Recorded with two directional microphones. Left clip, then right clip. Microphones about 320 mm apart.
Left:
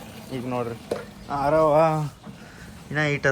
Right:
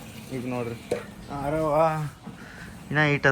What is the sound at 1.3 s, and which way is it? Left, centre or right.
Speech, left.